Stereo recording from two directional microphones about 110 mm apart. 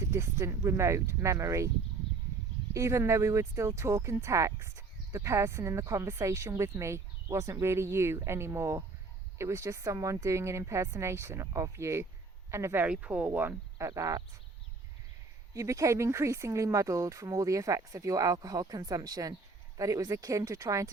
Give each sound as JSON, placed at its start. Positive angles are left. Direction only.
{"t": 0.1, "sound": "speech", "side_deg": -25}
{"t": 2.7, "sound": "speech", "side_deg": -25}
{"t": 15.5, "sound": "speech", "side_deg": -30}